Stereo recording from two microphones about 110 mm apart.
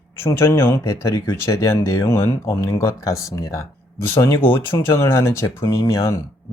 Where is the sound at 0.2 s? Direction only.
25° left (ahead or behind).